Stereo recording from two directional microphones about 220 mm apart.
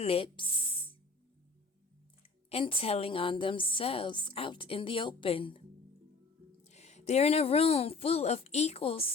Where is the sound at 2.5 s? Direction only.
25° left (ahead or behind).